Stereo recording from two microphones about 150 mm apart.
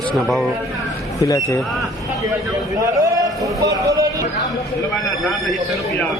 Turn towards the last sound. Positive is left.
turn(degrees=-20)  # may be behind; listen again after turning